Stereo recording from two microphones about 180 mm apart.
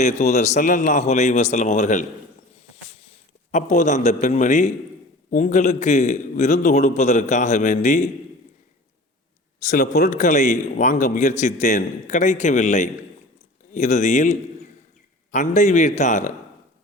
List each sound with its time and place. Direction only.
0.0 s a man's voice: 40° left (ahead or behind)
3.5 s a man's voice: 40° left (ahead or behind)
9.6 s a man's voice: 40° left (ahead or behind)